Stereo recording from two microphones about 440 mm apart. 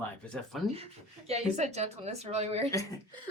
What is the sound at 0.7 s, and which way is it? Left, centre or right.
Speech, centre.